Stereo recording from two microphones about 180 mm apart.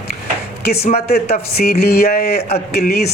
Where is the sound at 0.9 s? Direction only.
60° left (ahead or behind).